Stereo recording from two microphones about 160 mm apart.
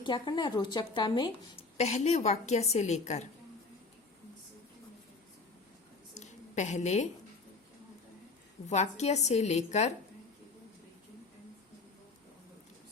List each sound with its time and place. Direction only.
0.0 s speech: 30° left (ahead or behind)
1.8 s a woman's voice: 45° left (ahead or behind)
6.1 s a sound: 45° left (ahead or behind)
8.6 s a woman's voice: 45° left (ahead or behind)